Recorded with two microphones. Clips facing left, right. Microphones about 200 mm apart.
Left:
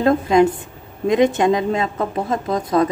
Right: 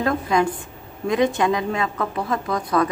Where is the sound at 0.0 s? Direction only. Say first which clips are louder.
Left 6 dB; 25° left (ahead or behind).